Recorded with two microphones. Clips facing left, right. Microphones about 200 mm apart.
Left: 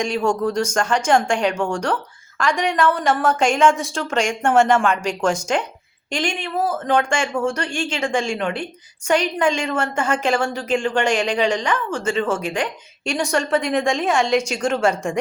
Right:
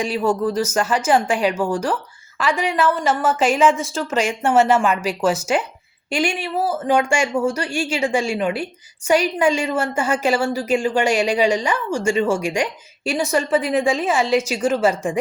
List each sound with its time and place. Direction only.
0.0 s a woman's voice: 5° right (ahead or behind)